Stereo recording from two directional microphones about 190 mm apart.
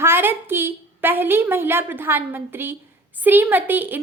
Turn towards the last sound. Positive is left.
turn(degrees=-10)  # may be behind; listen again after turning